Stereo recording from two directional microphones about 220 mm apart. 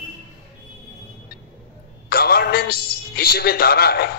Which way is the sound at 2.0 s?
45° left (ahead or behind).